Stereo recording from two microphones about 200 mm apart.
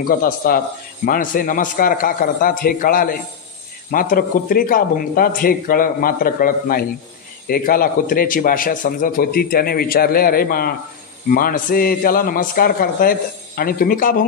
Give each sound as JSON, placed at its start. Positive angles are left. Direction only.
{"t": 0.4, "sound": "speech", "side_deg": 45}